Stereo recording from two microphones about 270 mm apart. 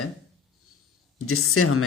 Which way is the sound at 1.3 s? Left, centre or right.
Left.